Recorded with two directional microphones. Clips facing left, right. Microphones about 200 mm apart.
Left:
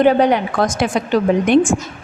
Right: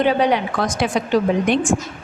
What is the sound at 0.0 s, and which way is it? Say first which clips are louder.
A woman's voice: left 4 dB; 50° left (ahead or behind).